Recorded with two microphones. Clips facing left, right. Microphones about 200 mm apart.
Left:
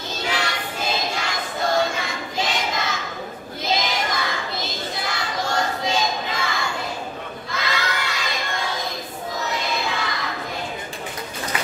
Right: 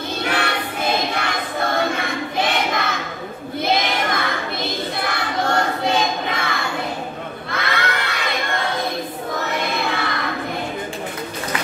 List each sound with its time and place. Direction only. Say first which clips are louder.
0.2 s music: right 3 dB; 60° right (ahead or behind)
3.6 s child singing: right 3 dB; 60° right (ahead or behind)
7.5 s crowd: right 3 dB; 60° right (ahead or behind)
9.4 s child singing: right 2 dB; 60° right (ahead or behind)